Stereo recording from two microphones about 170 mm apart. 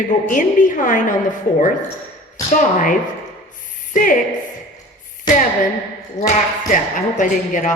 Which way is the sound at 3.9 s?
50° left (ahead or behind).